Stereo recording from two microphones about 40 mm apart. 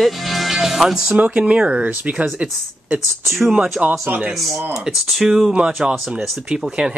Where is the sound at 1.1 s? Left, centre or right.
Right.